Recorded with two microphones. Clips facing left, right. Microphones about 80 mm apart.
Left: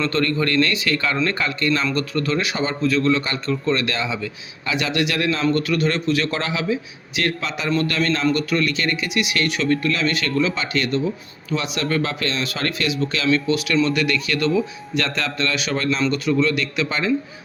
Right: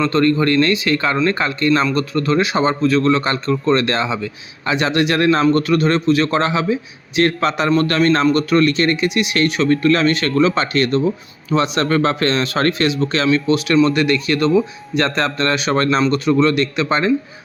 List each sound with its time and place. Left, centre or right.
0.1 s a man's voice: right